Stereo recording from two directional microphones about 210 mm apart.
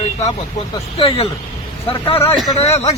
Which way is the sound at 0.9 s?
30° left (ahead or behind).